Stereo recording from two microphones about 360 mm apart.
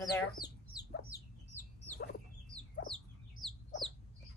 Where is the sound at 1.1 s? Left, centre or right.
Centre.